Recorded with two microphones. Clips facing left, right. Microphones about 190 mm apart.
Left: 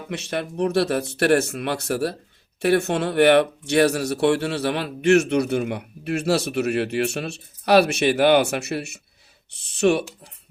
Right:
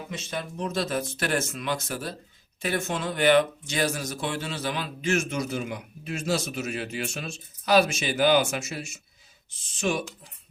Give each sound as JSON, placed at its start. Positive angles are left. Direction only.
{"t": 0.1, "sound": "speech", "side_deg": 65}